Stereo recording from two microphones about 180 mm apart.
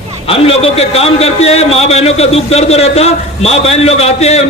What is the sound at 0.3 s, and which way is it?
A man's voice, 30° left (ahead or behind).